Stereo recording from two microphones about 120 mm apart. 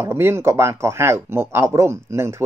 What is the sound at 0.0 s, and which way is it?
Speech, 20° right (ahead or behind).